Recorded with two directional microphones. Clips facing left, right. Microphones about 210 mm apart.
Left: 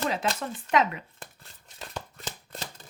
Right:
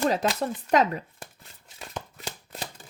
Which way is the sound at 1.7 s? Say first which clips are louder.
Right 1 dB; 5° right (ahead or behind).